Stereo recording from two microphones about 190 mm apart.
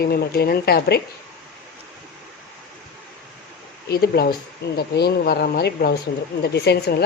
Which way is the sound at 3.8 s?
55° left (ahead or behind).